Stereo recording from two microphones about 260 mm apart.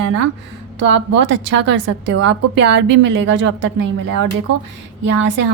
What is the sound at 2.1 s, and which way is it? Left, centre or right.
Speech, right.